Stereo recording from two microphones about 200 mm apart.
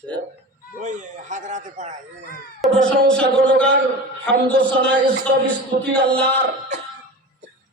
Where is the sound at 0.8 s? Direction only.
40° right (ahead or behind).